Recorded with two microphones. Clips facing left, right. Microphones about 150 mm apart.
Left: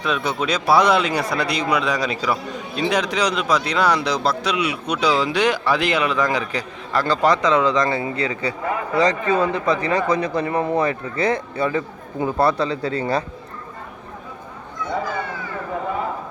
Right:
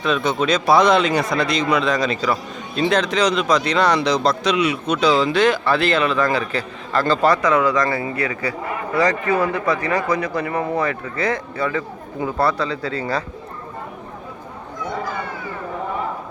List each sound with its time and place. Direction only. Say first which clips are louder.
0.0 s a man's voice: right 3 dB; 10° left (ahead or behind); by 13.2 s 25° left (ahead or behind)